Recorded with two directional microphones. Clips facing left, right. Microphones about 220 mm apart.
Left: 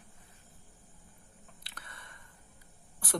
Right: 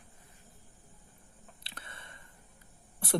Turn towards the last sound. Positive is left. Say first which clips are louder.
# right 4 dB
turn(degrees=-25)  # may be behind; listen again after turning